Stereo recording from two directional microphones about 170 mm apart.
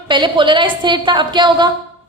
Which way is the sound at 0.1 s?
30° right (ahead or behind).